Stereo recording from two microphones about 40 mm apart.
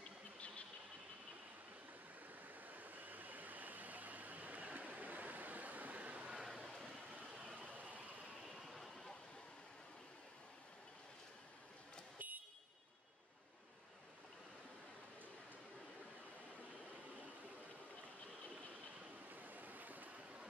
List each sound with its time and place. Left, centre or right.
2.4 s a sound: right
6.4 s vehicle: centre
7.2 s vehicle: right
8.6 s a sound: centre
12.2 s vehicle: right
19.3 s waves: right